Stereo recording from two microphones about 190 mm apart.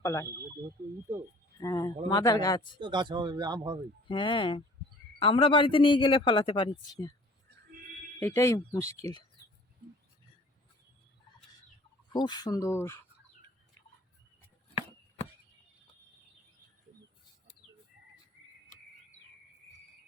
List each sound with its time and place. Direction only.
0.0 s speech: 15° left (ahead or behind)
1.6 s a sound: 15° left (ahead or behind)
2.0 s a man's voice: 20° left (ahead or behind)
2.8 s speech: 25° right (ahead or behind)
4.1 s a man's voice: 25° left (ahead or behind)
8.2 s speech: 15° left (ahead or behind)
12.1 s speech: 25° left (ahead or behind)